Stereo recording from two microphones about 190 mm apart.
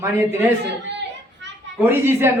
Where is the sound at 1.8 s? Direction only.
10° right (ahead or behind).